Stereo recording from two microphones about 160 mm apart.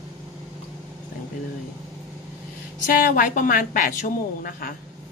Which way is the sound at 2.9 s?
60° left (ahead or behind).